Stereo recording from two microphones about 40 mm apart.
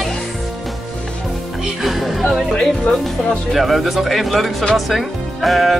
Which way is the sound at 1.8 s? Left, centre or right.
Centre.